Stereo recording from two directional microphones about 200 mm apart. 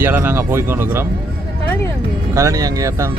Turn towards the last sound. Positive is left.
turn(degrees=-15)  # may be behind; listen again after turning